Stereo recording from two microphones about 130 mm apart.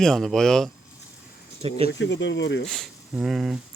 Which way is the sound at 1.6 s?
50° right (ahead or behind).